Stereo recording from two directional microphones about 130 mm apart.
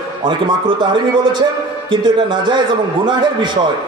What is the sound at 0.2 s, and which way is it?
Speech, 40° right (ahead or behind).